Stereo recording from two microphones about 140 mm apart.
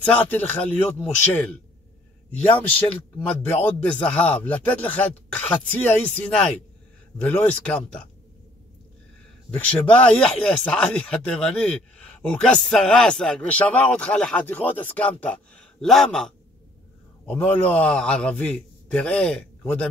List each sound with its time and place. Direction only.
0.0 s speech: 10° left (ahead or behind)
3.2 s speech: 15° left (ahead or behind)
9.5 s speech: 10° left (ahead or behind)